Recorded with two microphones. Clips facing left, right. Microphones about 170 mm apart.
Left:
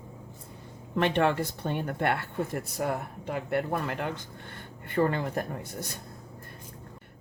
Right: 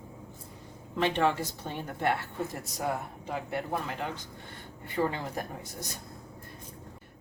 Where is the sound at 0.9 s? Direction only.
60° left (ahead or behind).